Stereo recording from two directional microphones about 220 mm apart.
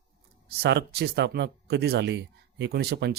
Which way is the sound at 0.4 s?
45° right (ahead or behind).